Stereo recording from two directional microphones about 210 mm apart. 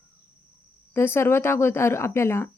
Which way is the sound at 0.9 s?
10° left (ahead or behind).